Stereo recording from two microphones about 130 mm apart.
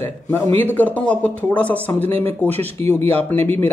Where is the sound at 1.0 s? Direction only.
10° left (ahead or behind).